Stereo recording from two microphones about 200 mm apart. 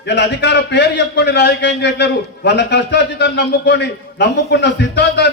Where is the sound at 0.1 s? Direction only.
60° left (ahead or behind).